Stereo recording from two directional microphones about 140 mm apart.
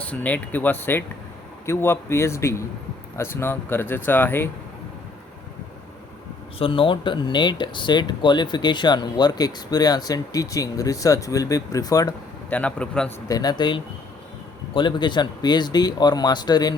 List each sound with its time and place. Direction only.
0.0 s a man's voice: 10° left (ahead or behind)
6.6 s speech: 40° left (ahead or behind)
12.5 s speech: 10° left (ahead or behind)
13.2 s a man's voice: 25° left (ahead or behind)